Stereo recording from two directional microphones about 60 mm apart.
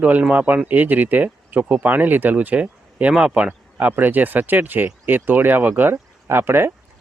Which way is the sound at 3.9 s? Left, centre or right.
Right.